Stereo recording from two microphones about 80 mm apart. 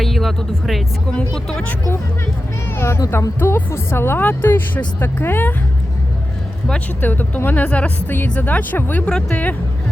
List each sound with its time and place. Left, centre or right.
0.0 s speech: centre
2.7 s speech: left
6.7 s speech: centre